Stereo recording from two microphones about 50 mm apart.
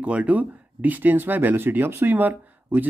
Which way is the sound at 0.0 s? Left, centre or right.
Right.